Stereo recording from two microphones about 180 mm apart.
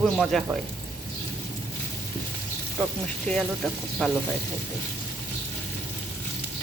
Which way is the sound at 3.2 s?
5° left (ahead or behind).